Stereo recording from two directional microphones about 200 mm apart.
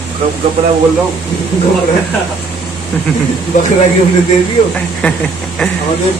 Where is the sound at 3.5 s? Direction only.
35° left (ahead or behind).